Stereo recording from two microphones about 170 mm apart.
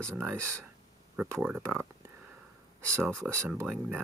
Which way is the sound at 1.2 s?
10° right (ahead or behind).